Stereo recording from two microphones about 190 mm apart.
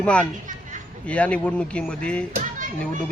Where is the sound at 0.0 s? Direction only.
5° left (ahead or behind).